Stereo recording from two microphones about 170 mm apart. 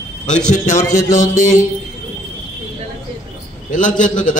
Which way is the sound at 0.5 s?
45° left (ahead or behind).